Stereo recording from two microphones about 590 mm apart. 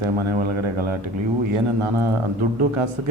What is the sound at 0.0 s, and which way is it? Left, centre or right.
Speech, right.